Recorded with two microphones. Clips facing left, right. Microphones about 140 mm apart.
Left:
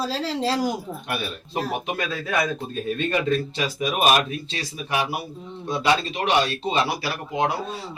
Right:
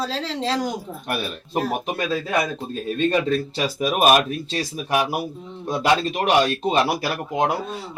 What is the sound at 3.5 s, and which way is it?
Speech, 40° right (ahead or behind).